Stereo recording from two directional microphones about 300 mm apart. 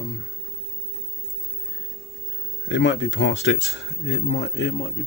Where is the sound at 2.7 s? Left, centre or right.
Left.